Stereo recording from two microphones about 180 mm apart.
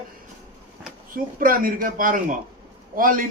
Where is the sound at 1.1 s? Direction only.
50° right (ahead or behind).